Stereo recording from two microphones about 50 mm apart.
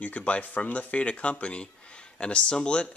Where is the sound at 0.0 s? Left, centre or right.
Left.